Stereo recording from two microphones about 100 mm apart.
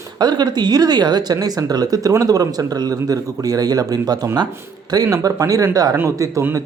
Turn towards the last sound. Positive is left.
turn(degrees=-35)  # may be behind; listen again after turning